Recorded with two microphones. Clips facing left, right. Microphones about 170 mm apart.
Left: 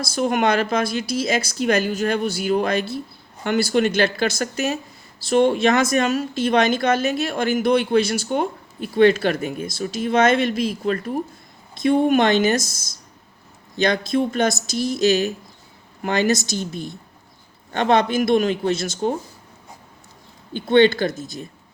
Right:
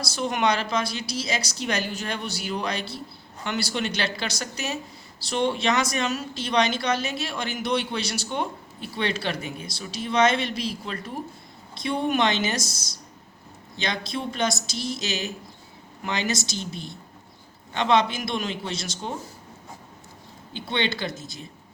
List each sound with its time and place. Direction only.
0.0 s speech: 50° left (ahead or behind)
20.5 s speech: 50° left (ahead or behind)